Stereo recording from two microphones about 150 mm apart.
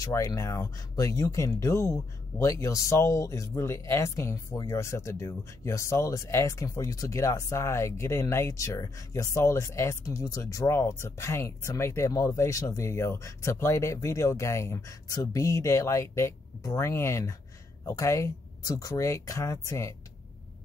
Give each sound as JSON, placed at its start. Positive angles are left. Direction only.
{"t": 0.0, "sound": "speech", "side_deg": 20}